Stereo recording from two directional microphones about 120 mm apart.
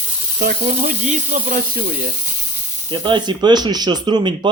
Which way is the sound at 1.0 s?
80° right.